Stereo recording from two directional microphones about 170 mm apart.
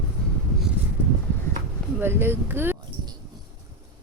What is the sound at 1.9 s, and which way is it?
Speech, 10° right (ahead or behind).